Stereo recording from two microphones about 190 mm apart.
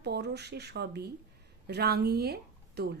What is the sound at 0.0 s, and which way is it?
Speech, 60° right (ahead or behind).